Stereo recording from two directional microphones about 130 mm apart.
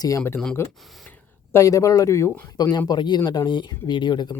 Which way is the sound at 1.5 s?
25° left (ahead or behind).